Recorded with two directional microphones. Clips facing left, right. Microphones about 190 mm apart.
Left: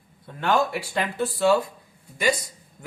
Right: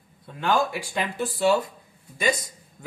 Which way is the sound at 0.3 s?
15° right (ahead or behind).